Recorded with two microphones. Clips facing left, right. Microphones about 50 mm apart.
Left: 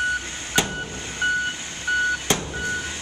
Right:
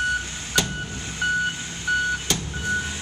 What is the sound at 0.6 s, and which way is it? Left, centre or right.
Vehicle, left.